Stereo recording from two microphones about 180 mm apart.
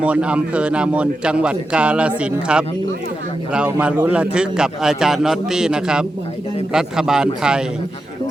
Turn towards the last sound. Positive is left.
turn(degrees=-5)  # may be behind; listen again after turning